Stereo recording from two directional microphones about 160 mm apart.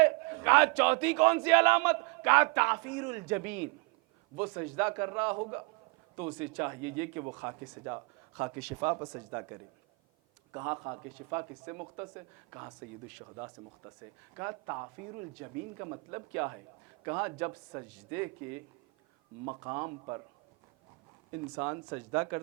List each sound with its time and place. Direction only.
0.0 s a sound: 15° right (ahead or behind)
1.0 s a man's voice: 10° right (ahead or behind)
6.4 s a man's voice: 15° right (ahead or behind)
14.3 s speech: 20° right (ahead or behind)
19.5 s speech: 25° right (ahead or behind)
21.5 s speech: 25° right (ahead or behind)